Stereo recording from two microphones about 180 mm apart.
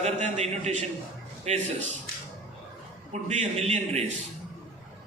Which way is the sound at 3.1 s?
40° right (ahead or behind).